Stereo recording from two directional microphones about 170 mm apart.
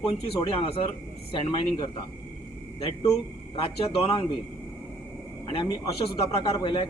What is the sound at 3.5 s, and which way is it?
Speech, 35° left (ahead or behind).